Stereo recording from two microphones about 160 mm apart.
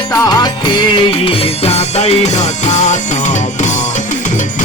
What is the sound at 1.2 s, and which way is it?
Music, 35° left (ahead or behind).